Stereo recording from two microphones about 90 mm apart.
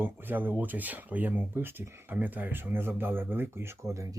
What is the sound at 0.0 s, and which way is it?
Speech, 20° right (ahead or behind).